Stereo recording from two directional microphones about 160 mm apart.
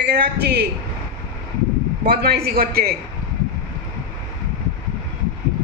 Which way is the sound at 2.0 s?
70° right (ahead or behind).